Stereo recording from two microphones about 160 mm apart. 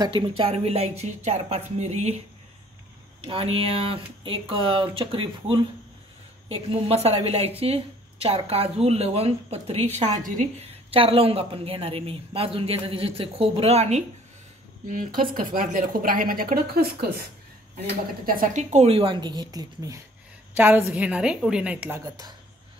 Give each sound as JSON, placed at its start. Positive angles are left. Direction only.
{"t": 0.0, "sound": "speech", "side_deg": -35}
{"t": 3.3, "sound": "speech", "side_deg": -35}
{"t": 9.9, "sound": "a woman's voice", "side_deg": -50}
{"t": 10.9, "sound": "speech", "side_deg": -35}
{"t": 14.9, "sound": "a woman's voice", "side_deg": -60}
{"t": 18.2, "sound": "speech", "side_deg": -60}
{"t": 20.5, "sound": "a woman's voice", "side_deg": -10}